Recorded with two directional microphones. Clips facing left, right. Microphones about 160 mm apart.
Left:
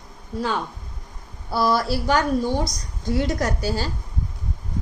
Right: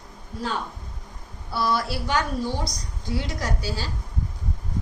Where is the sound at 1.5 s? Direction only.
40° left (ahead or behind).